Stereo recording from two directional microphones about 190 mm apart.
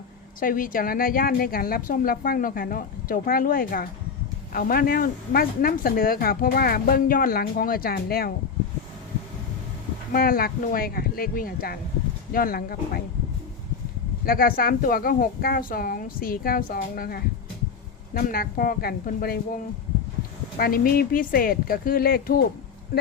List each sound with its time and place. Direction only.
0.3 s speech: 45° left (ahead or behind)
10.1 s speech: 50° left (ahead or behind)
14.3 s speech: 50° left (ahead or behind)
20.6 s speech: 50° left (ahead or behind)